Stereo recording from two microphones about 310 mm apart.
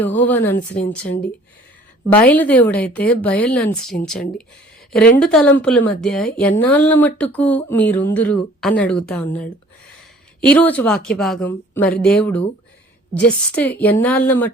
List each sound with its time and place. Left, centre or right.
0.0 s speech: centre
0.5 s speech: left
2.1 s speech: centre
10.5 s speech: centre